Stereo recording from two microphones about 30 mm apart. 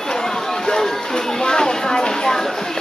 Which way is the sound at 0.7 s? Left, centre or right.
Left.